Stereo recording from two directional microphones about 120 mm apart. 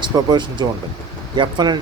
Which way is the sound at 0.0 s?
40° right (ahead or behind).